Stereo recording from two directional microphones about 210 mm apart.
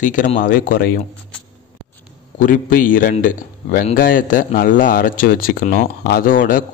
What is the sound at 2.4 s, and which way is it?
A man's voice, 40° left (ahead or behind).